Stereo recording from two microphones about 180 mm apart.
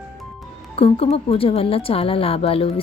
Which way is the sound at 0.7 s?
30° left (ahead or behind).